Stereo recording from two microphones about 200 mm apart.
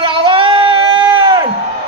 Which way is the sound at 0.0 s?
25° right (ahead or behind).